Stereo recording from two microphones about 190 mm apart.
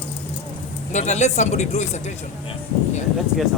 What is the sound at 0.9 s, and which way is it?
Speech, 35° left (ahead or behind).